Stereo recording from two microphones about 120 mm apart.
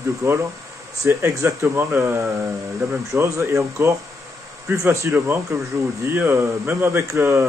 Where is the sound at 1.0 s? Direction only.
25° right (ahead or behind).